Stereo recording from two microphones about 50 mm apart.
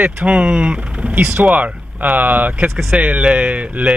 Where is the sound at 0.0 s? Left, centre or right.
Right.